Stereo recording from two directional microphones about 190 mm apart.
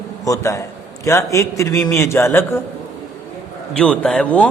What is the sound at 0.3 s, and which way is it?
Speech, 15° left (ahead or behind).